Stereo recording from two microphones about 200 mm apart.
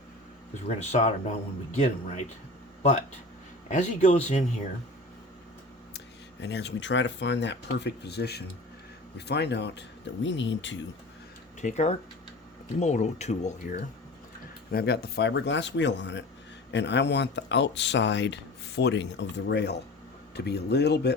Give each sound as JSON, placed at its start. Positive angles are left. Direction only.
{"t": 0.8, "sound": "speech", "side_deg": 35}
{"t": 3.7, "sound": "speech", "side_deg": 35}
{"t": 6.4, "sound": "speech", "side_deg": 60}
{"t": 11.6, "sound": "speech", "side_deg": 35}
{"t": 14.7, "sound": "speech", "side_deg": 50}